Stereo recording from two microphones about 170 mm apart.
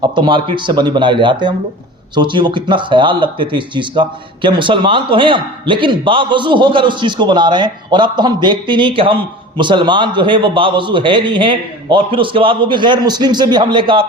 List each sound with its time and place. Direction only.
0.2 s speech: 30° right (ahead or behind)